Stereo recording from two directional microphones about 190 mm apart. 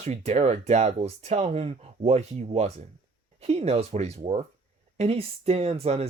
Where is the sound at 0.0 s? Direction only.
35° right (ahead or behind).